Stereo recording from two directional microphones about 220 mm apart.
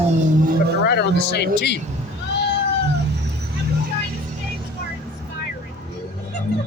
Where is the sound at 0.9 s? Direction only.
50° left (ahead or behind).